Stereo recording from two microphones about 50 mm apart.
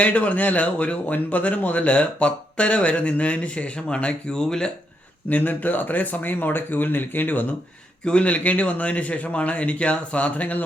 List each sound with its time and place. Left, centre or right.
0.0 s a man's voice: left; by 4.7 s centre
5.3 s speech: left
8.0 s a man's voice: left